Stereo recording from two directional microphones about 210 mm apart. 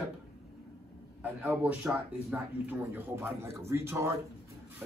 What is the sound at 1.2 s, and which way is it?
Speech, 5° right (ahead or behind).